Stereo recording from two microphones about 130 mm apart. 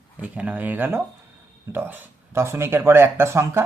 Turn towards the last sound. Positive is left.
turn(degrees=-20)  # may be behind; listen again after turning